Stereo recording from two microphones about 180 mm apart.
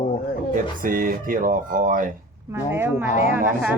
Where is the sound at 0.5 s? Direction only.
50° right (ahead or behind).